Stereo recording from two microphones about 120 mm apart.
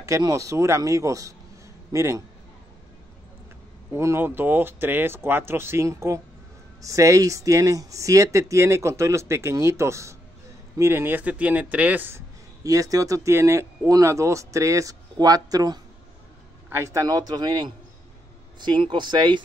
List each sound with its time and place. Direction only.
0.0 s speech: 25° right (ahead or behind)
3.9 s speech: 20° right (ahead or behind)
12.6 s a man's voice: 30° right (ahead or behind)